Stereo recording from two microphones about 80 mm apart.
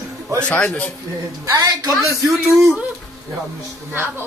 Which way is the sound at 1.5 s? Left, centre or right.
Right.